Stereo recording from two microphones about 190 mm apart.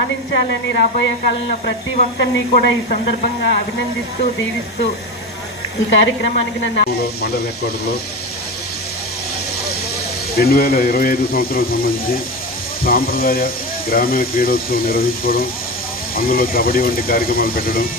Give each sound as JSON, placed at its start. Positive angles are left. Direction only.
{"t": 0.3, "sound": "speech", "side_deg": 65}
{"t": 2.1, "sound": "speech", "side_deg": 55}
{"t": 5.9, "sound": "speech", "side_deg": 65}
{"t": 10.3, "sound": "speech", "side_deg": 55}
{"t": 12.8, "sound": "speech", "side_deg": 50}